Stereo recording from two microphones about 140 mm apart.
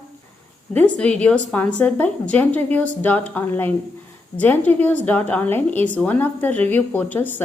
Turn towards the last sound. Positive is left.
turn(degrees=15)  # may be behind; listen again after turning